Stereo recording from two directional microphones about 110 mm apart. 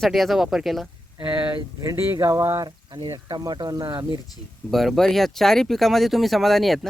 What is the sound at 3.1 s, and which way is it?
Speech, 30° right (ahead or behind).